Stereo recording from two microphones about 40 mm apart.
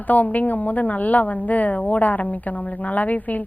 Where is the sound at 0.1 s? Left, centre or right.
Left.